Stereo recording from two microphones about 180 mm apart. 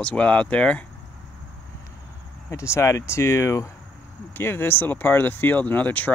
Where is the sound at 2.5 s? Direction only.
15° left (ahead or behind).